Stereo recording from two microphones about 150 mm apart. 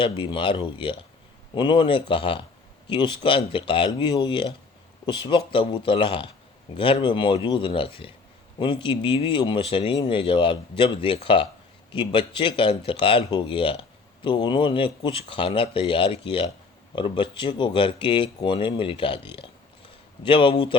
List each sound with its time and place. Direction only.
0.0 s speech: 30° left (ahead or behind)